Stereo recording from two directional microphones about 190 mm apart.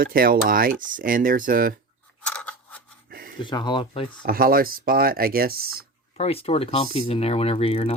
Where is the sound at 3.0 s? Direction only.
50° right (ahead or behind).